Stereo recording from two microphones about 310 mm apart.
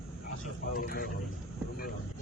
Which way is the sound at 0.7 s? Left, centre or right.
Left.